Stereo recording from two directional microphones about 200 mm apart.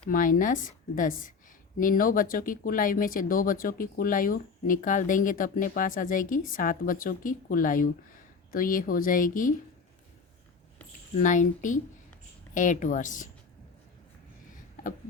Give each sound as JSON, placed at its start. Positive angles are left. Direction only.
{"t": 0.1, "sound": "a woman's voice", "side_deg": 40}
{"t": 11.2, "sound": "a woman's voice", "side_deg": 40}